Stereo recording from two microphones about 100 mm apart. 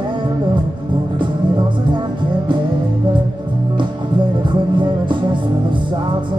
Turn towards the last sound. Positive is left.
turn(degrees=-55)  # may be behind; listen again after turning